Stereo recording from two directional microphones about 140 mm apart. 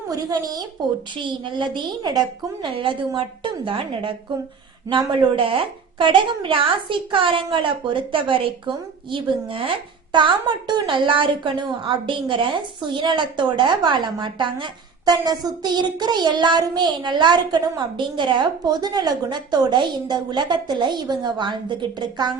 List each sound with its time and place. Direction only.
0.1 s a woman's voice: 25° right (ahead or behind)